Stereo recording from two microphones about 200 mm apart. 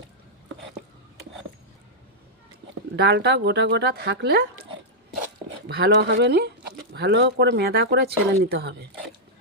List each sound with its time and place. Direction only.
2.9 s speech: 55° right (ahead or behind)
5.6 s speech: 55° right (ahead or behind)